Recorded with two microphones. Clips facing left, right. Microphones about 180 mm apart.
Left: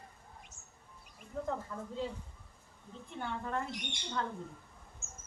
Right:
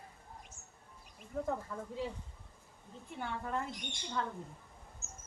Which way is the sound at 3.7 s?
70° left (ahead or behind).